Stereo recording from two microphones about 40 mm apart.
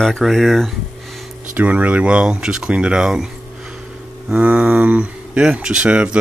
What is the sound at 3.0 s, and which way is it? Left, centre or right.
Speech, centre.